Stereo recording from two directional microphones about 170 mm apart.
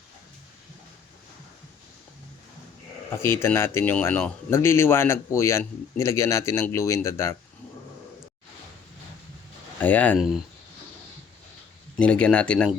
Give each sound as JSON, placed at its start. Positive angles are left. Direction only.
{"t": 3.1, "sound": "speech", "side_deg": 15}
{"t": 9.8, "sound": "speech", "side_deg": 10}
{"t": 10.2, "sound": "speech", "side_deg": -5}
{"t": 11.9, "sound": "speech", "side_deg": 5}